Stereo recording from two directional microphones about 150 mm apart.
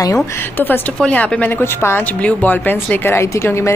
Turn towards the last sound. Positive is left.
turn(degrees=15)  # may be behind; listen again after turning